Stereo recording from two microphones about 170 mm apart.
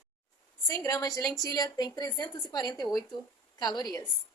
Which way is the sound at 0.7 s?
20° left (ahead or behind).